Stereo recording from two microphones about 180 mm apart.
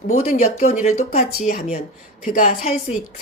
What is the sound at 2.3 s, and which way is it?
Speech, 50° left (ahead or behind).